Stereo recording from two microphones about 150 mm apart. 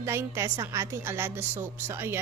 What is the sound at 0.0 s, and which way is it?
A woman's voice, 20° right (ahead or behind).